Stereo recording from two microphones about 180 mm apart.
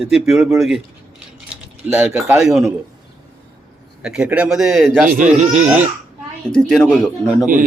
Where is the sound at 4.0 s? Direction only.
5° right (ahead or behind).